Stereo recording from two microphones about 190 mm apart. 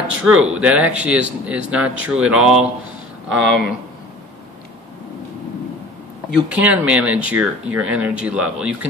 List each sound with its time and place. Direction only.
0.2 s speech: 5° right (ahead or behind)
3.3 s speech: 75° right (ahead or behind)
6.5 s speech: 5° right (ahead or behind)